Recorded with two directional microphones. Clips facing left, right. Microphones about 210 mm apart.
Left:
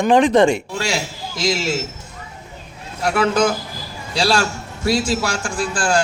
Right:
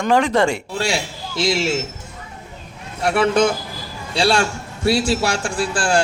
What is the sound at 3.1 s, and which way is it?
A man's voice, 30° right (ahead or behind).